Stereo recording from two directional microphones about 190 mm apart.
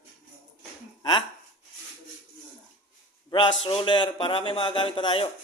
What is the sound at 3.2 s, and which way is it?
Speech, 25° left (ahead or behind).